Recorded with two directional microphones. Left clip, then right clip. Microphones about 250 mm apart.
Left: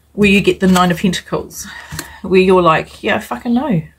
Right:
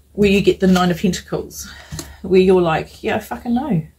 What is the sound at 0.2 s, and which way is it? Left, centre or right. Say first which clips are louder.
Speech: left 2 dB; centre.